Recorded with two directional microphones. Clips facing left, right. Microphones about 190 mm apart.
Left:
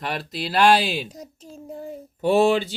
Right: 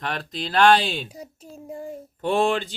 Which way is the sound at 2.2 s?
5° left (ahead or behind).